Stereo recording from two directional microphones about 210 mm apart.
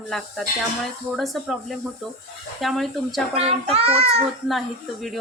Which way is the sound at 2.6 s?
Centre (ahead or behind).